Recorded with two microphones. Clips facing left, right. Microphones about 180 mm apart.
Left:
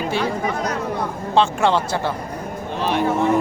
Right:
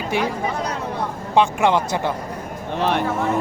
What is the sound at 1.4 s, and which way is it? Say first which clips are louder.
Speech: even; 15° right (ahead or behind).